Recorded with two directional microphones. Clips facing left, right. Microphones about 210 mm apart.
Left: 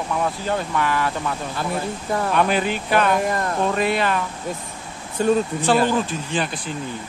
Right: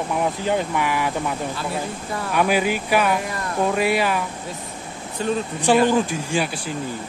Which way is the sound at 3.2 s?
50° left (ahead or behind).